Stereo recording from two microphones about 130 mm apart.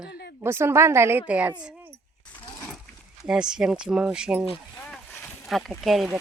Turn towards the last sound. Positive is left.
turn(degrees=0)  # may be behind; listen again after turning